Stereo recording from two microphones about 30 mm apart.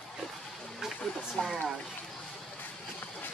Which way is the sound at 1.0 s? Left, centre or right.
Centre.